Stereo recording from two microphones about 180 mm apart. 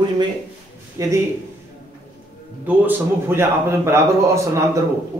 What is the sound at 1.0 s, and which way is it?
Speech, 20° right (ahead or behind).